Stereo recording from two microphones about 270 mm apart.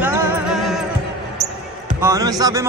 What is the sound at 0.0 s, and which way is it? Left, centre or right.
Music, centre.